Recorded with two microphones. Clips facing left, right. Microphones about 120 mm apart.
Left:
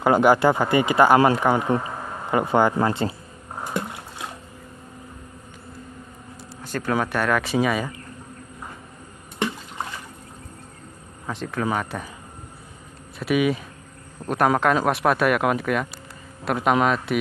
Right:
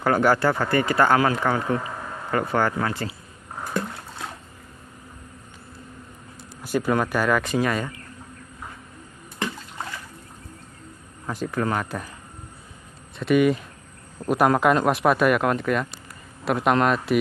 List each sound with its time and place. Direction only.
0.0 s speech: 15° left (ahead or behind)
3.5 s rowboat: 15° left (ahead or behind)
6.6 s speech: 10° right (ahead or behind)
11.2 s speech: centre (ahead or behind)
13.2 s speech: 5° left (ahead or behind)